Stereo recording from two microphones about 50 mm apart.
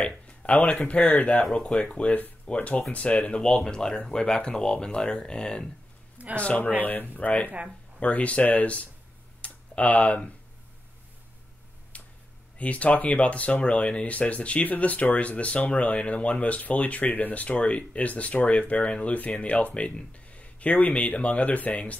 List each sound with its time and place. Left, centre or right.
0.0 s speech: left
6.3 s speech: left
9.4 s a sound: left
11.9 s finger snapping: left
12.5 s speech: left